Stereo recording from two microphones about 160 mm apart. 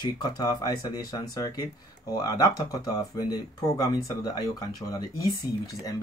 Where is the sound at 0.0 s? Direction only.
25° left (ahead or behind).